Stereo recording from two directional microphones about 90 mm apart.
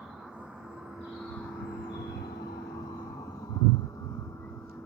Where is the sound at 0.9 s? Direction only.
5° left (ahead or behind); by 2.0 s 20° left (ahead or behind).